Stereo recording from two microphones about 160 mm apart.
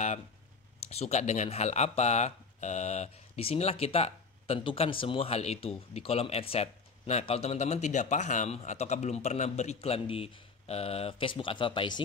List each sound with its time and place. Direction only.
0.7 s speech: 40° left (ahead or behind)